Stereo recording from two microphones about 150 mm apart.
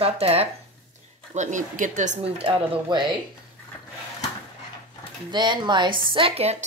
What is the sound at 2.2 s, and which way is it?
Speech, 40° right (ahead or behind).